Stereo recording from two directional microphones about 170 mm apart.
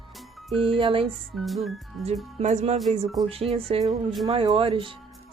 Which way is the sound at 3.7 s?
35° right (ahead or behind).